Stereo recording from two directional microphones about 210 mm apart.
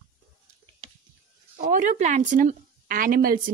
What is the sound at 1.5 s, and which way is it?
A woman's voice, 35° right (ahead or behind).